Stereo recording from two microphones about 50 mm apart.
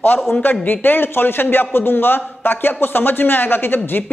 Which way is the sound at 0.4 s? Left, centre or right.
Left.